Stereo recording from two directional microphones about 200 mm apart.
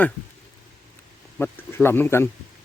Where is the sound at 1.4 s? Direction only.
10° left (ahead or behind).